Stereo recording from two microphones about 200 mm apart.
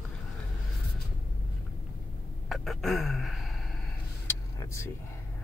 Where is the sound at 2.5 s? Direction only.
Centre (ahead or behind).